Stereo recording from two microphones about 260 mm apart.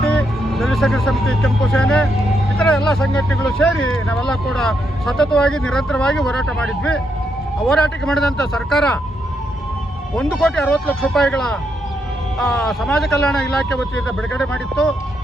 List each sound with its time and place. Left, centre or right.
0.0 s speech: centre
10.2 s speech: centre